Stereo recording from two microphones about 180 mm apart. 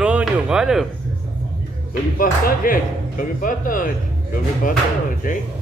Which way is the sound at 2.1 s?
50° left (ahead or behind).